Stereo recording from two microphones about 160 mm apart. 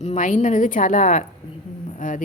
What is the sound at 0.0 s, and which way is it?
A woman's voice, 50° left (ahead or behind).